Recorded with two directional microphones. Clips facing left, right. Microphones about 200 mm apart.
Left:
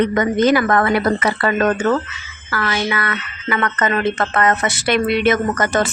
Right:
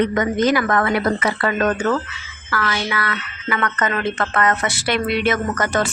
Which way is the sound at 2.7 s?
20° left (ahead or behind).